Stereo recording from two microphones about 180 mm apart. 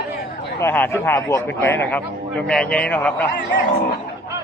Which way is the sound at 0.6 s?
15° left (ahead or behind).